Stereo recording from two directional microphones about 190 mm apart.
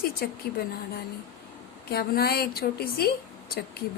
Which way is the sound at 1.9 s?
55° left (ahead or behind).